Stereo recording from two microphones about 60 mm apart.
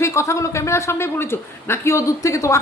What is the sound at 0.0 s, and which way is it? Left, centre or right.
A man's voice, left.